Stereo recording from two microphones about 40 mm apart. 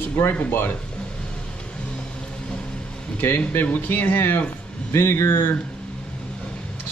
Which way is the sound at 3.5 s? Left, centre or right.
Left.